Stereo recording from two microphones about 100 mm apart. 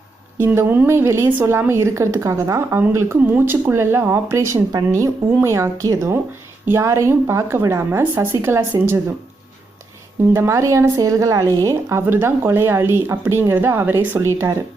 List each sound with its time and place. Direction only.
0.3 s speech: 25° right (ahead or behind)
10.3 s a woman's voice: 30° right (ahead or behind)